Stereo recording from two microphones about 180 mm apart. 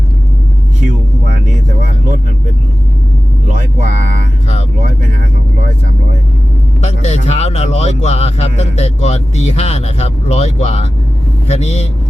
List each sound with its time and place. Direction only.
3.5 s speech: 45° right (ahead or behind)
6.8 s speech: 35° left (ahead or behind)